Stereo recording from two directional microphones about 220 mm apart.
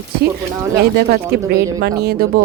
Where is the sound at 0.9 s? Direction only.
45° right (ahead or behind).